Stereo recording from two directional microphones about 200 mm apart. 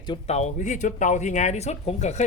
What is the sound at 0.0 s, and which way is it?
Speech, 25° left (ahead or behind).